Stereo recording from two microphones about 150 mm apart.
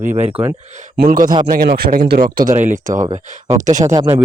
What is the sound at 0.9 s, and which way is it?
Speech, 70° right (ahead or behind).